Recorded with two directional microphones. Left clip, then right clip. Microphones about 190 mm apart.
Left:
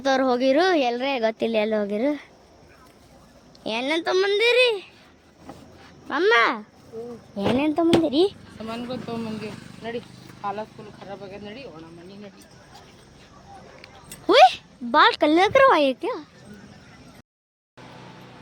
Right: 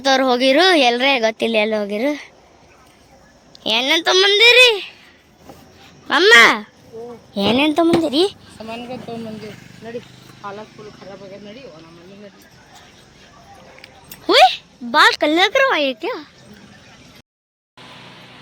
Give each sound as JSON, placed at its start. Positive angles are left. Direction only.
{"t": 0.0, "sound": "a woman's voice", "side_deg": 0}
{"t": 3.6, "sound": "a woman's voice", "side_deg": 0}
{"t": 6.1, "sound": "a woman's voice", "side_deg": -5}
{"t": 8.0, "sound": "a woman's voice", "side_deg": 5}
{"t": 8.5, "sound": "speech", "side_deg": 35}
{"t": 13.8, "sound": "a woman's voice", "side_deg": 10}